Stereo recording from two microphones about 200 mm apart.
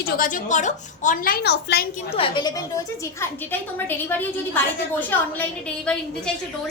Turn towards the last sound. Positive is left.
turn(degrees=10)  # may be behind; listen again after turning